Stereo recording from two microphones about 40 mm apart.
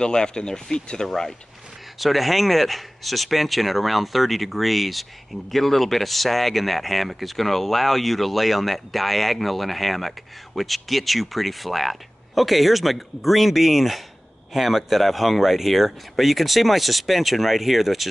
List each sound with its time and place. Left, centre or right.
0.0 s speech: centre
1.0 s speech: centre